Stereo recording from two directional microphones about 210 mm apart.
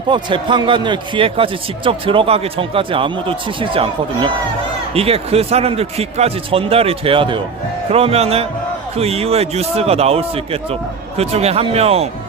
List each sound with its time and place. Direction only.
0.1 s a man's voice: 20° right (ahead or behind)